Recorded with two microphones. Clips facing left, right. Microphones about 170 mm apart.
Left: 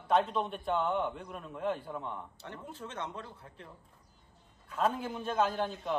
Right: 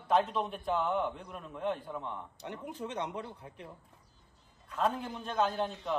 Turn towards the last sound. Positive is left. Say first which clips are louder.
# even
turn(degrees=0)  # may be behind; listen again after turning